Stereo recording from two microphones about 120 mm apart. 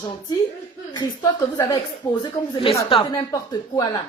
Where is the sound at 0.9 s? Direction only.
30° left (ahead or behind).